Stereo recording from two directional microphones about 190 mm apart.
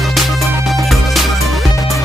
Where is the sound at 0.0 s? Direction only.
Centre (ahead or behind).